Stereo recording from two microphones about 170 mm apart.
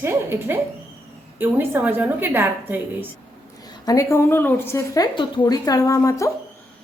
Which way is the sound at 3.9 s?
15° left (ahead or behind).